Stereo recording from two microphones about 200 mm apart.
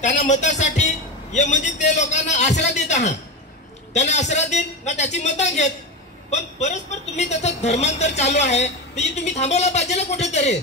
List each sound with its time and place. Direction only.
0.0 s a woman's voice: 35° left (ahead or behind)